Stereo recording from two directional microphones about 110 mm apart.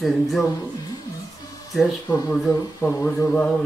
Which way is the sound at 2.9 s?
30° left (ahead or behind).